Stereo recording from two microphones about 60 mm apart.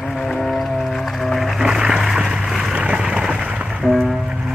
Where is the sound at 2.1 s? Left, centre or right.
Centre.